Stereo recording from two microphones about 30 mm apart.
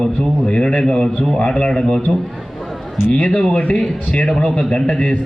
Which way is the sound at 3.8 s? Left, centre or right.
Left.